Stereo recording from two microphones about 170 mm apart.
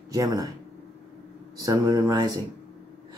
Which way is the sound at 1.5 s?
20° right (ahead or behind).